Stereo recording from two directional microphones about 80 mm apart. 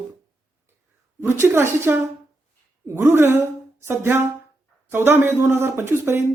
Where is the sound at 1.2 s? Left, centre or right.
Right.